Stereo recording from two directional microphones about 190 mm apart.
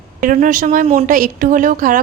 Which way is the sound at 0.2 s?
45° right (ahead or behind).